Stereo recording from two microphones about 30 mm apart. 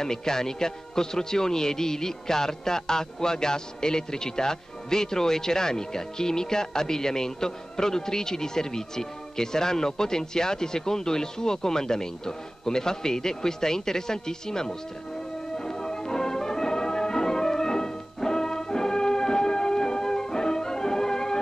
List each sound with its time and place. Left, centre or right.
0.0 s a man's voice: centre
15.5 s music: left